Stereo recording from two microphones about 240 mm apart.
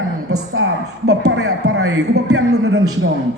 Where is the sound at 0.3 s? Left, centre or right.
Right.